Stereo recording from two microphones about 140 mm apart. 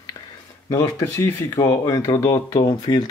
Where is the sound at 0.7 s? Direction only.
25° left (ahead or behind).